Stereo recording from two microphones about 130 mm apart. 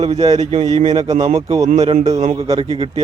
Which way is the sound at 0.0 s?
55° right (ahead or behind).